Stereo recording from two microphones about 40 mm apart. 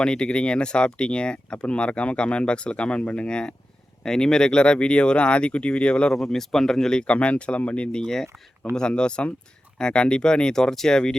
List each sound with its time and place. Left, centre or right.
0.0 s speech: left
6.1 s speech: centre
7.0 s speech: left
8.0 s speech: centre
8.9 s speech: left